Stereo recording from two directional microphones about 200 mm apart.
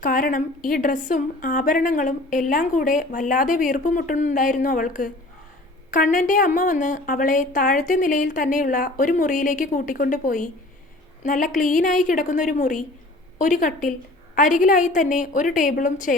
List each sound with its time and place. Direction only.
0.0 s a woman's voice: 45° left (ahead or behind)